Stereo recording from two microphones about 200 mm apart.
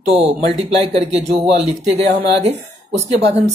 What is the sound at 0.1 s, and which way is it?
Speech, 30° right (ahead or behind).